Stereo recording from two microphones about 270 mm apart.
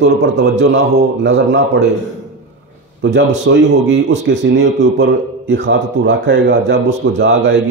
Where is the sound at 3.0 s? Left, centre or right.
Right.